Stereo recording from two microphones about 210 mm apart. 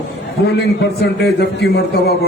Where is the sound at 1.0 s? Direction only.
50° left (ahead or behind).